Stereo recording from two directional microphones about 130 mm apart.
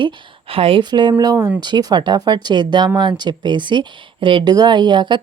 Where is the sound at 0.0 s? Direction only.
45° right (ahead or behind).